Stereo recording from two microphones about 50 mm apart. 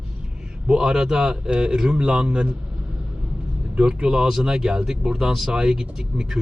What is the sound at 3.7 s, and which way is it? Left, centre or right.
Speech, centre.